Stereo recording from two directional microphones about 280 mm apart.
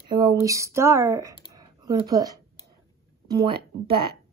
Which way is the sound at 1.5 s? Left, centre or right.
Centre.